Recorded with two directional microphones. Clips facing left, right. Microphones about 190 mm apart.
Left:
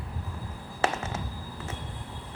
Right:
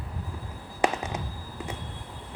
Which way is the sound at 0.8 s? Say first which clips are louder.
Right 2 dB; 15° right (ahead or behind).